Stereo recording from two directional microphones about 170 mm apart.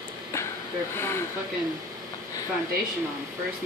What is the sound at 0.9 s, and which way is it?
Speech, 15° left (ahead or behind).